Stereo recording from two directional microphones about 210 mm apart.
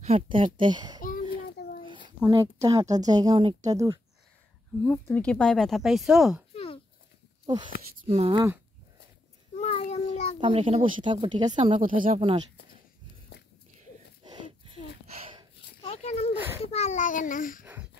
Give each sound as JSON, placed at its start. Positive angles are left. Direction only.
{"t": 0.0, "sound": "speech", "side_deg": -25}
{"t": 1.6, "sound": "a sound", "side_deg": 50}
{"t": 2.1, "sound": "speech", "side_deg": -15}
{"t": 4.8, "sound": "speech", "side_deg": 10}
{"t": 6.5, "sound": "a sound", "side_deg": 30}
{"t": 7.4, "sound": "speech", "side_deg": -20}
{"t": 8.0, "sound": "speech", "side_deg": -30}
{"t": 9.6, "sound": "child singing", "side_deg": 30}
{"t": 10.4, "sound": "speech", "side_deg": -25}
{"t": 14.2, "sound": "a sound", "side_deg": -20}
{"t": 15.8, "sound": "a sound", "side_deg": 30}
{"t": 16.6, "sound": "a child's voice", "side_deg": 30}